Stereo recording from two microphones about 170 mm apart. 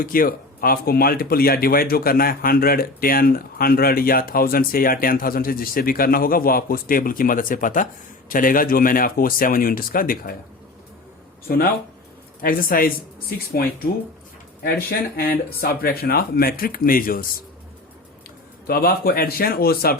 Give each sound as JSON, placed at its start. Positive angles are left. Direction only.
{"t": 0.0, "sound": "speech", "side_deg": 55}
{"t": 11.4, "sound": "speech", "side_deg": 60}
{"t": 18.7, "sound": "speech", "side_deg": 60}